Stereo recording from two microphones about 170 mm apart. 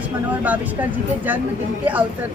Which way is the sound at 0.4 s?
10° right (ahead or behind).